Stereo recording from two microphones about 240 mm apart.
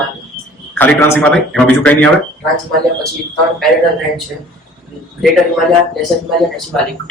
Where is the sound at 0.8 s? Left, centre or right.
Centre.